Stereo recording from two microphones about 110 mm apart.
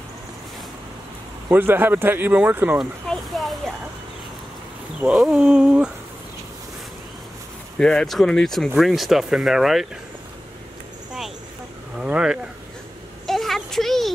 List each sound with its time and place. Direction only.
1.5 s speech: 20° right (ahead or behind)
2.8 s a sound: centre (ahead or behind)
5.0 s speech: 5° right (ahead or behind)
7.8 s speech: 5° left (ahead or behind)
12.0 s speech: 5° right (ahead or behind)
13.3 s a sound: centre (ahead or behind)